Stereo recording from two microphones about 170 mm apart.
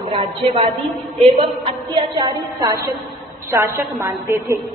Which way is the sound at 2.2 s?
20° right (ahead or behind).